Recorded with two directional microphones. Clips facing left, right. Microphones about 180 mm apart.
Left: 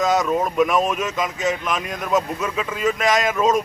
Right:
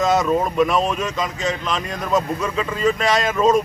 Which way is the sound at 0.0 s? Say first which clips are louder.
Right 1 dB; centre (ahead or behind).